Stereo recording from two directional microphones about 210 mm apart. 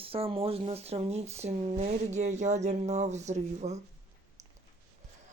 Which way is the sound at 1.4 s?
35° right (ahead or behind).